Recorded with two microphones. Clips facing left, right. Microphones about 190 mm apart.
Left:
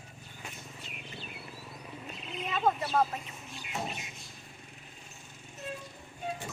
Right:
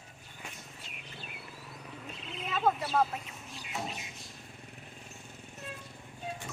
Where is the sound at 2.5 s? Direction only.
5° right (ahead or behind).